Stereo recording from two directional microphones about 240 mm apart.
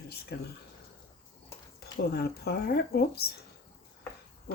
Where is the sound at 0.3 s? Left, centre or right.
Left.